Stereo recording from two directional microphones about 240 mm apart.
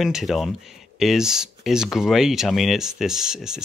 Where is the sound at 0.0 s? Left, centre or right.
Centre.